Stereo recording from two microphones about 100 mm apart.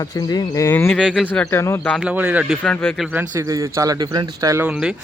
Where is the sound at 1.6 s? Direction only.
25° left (ahead or behind).